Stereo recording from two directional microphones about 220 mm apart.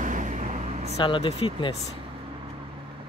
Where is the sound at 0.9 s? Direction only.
20° left (ahead or behind).